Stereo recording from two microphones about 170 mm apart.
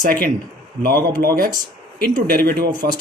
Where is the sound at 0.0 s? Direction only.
55° right (ahead or behind).